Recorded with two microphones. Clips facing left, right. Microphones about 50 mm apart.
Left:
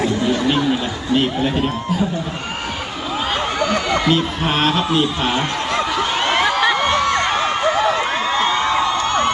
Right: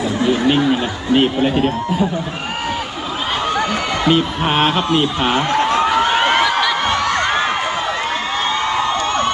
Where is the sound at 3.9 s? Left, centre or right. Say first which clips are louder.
Right 1 dB; centre.